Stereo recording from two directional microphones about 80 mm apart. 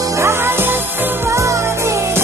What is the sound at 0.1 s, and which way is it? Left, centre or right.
Music, right.